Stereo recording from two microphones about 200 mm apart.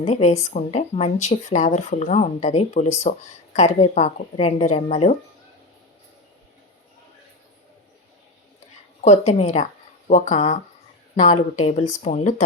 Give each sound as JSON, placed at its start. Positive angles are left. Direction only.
{"t": 0.0, "sound": "speech", "side_deg": 35}
{"t": 9.0, "sound": "a woman's voice", "side_deg": 35}